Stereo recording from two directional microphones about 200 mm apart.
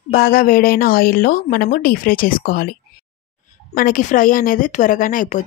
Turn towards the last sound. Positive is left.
turn(degrees=40)  # may be behind; listen again after turning